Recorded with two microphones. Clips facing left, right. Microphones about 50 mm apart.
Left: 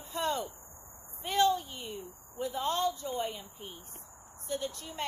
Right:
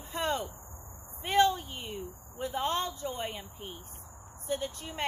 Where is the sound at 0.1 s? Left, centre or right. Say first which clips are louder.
Right 1 dB; right.